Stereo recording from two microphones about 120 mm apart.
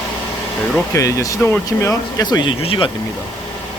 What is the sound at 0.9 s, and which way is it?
Speech, 30° left (ahead or behind).